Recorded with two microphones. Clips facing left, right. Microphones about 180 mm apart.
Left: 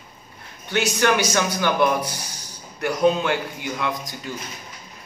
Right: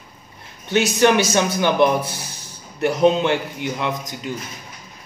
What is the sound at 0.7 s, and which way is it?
A man's voice, 20° right (ahead or behind).